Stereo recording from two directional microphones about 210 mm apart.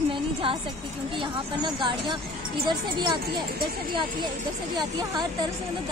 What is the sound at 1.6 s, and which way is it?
Speech, 25° right (ahead or behind).